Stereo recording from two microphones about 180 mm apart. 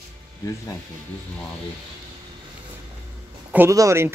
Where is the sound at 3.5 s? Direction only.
15° right (ahead or behind).